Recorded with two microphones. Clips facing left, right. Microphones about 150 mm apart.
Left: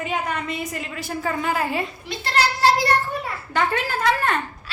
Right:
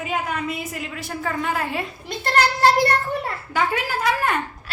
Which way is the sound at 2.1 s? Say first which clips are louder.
Right 3 dB; 50° right (ahead or behind).